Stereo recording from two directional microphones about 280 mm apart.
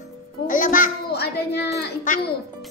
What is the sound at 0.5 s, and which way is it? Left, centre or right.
A child's voice, left.